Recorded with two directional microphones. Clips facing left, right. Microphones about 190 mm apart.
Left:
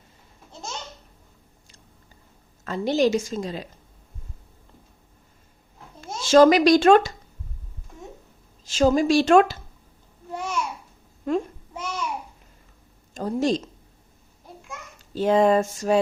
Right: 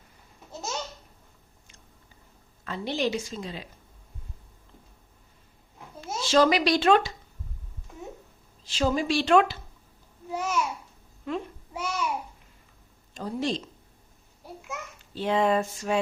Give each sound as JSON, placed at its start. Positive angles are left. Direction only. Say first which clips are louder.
{"t": 2.6, "sound": "a woman's voice", "louder": "left 7 dB", "side_deg": 45}
{"t": 6.2, "sound": "a woman's voice", "louder": "left 7 dB", "side_deg": 45}
{"t": 8.6, "sound": "a woman's voice", "louder": "left 7 dB", "side_deg": 45}
{"t": 10.2, "sound": "babbling", "louder": "right 1 dB", "side_deg": -5}
{"t": 11.3, "sound": "a woman's voice", "louder": "left 7 dB", "side_deg": 45}
{"t": 11.7, "sound": "a sound", "louder": "even", "side_deg": -10}
{"t": 13.1, "sound": "a woman's voice", "louder": "left 6 dB", "side_deg": 45}
{"t": 15.1, "sound": "a sound", "louder": "left 6 dB", "side_deg": 45}